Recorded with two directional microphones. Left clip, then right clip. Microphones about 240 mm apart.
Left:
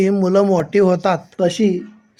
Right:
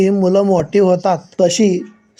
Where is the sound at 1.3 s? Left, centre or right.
Right.